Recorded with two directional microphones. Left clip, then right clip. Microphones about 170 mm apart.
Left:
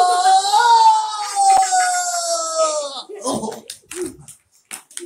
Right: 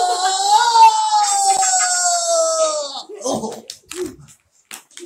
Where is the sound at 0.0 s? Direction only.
Centre (ahead or behind).